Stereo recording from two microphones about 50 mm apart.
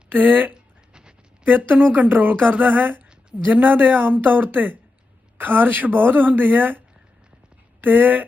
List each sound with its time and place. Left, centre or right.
0.1 s speech: right
0.5 s a sound: centre
1.5 s speech: right